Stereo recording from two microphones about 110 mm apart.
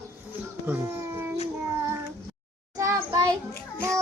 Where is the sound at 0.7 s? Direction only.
25° right (ahead or behind).